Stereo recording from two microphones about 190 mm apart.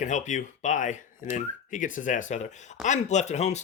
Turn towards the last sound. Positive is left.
turn(degrees=35)  # may be behind; listen again after turning